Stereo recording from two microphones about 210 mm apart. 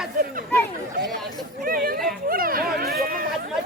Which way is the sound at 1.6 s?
45° right (ahead or behind).